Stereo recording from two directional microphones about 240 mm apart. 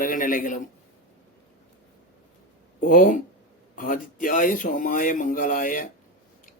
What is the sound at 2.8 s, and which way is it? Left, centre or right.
Speech, left.